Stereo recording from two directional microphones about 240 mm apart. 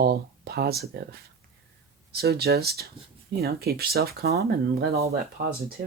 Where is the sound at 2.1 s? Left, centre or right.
Right.